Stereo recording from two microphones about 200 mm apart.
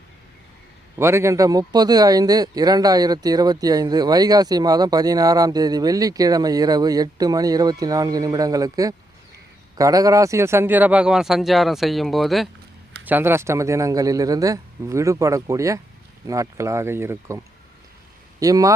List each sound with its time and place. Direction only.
0.9 s speech: 15° right (ahead or behind)
13.1 s a man's voice: 10° right (ahead or behind)